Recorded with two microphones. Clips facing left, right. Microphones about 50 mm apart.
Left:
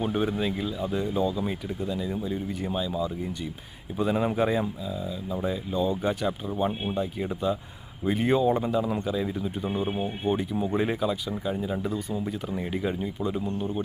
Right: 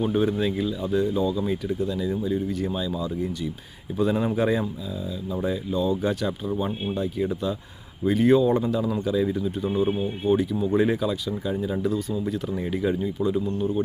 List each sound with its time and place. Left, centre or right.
0.0 s speech: centre
9.9 s speech: left
10.3 s speech: centre